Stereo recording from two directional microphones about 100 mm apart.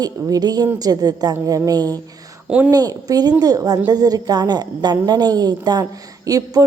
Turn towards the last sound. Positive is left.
turn(degrees=-40)  # may be behind; listen again after turning